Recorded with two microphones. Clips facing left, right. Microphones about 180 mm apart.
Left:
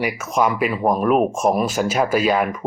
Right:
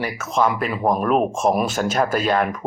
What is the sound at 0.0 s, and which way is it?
Speech, 15° left (ahead or behind).